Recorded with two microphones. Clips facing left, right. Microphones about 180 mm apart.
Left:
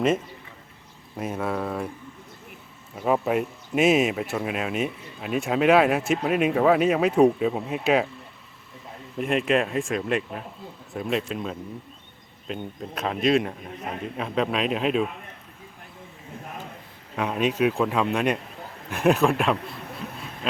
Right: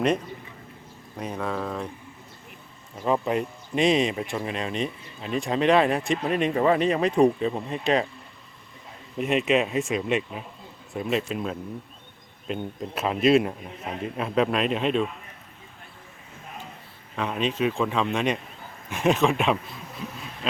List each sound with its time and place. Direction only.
1.1 s a man's voice: 5° left (ahead or behind)
2.9 s speech: 5° left (ahead or behind)
9.1 s speech: centre (ahead or behind)
17.2 s a man's voice: 10° left (ahead or behind)
19.8 s a sound: 60° left (ahead or behind)